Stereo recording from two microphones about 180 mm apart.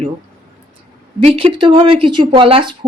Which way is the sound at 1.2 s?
30° right (ahead or behind).